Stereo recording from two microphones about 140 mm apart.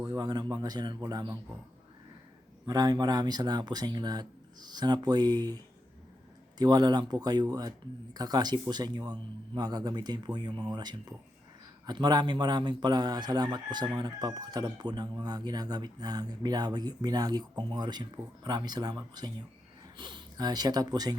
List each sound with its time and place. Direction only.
0.0 s speech: 30° right (ahead or behind)
2.6 s speech: 25° right (ahead or behind)
6.6 s a man's voice: 30° right (ahead or behind)